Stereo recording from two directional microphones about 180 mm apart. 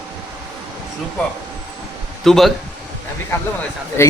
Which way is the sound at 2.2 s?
Centre (ahead or behind).